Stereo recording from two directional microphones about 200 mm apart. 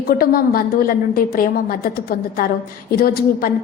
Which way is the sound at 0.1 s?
45° left (ahead or behind).